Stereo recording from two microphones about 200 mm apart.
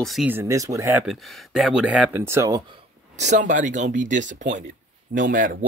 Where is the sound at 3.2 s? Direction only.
35° right (ahead or behind).